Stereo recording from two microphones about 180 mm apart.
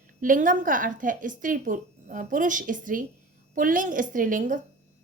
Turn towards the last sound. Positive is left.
turn(degrees=-45)  # may be behind; listen again after turning